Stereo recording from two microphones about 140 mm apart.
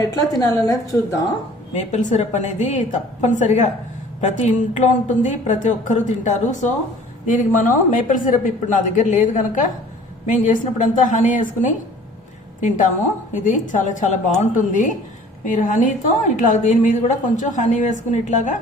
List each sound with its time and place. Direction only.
0.0 s a woman's voice: 25° left (ahead or behind)
1.7 s a woman's voice: 60° left (ahead or behind)
12.6 s a woman's voice: 65° left (ahead or behind)